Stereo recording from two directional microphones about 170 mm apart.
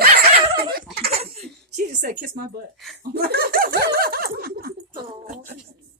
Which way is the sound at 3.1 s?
65° right (ahead or behind).